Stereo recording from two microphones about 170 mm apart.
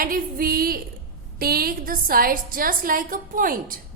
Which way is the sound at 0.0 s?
60° right (ahead or behind).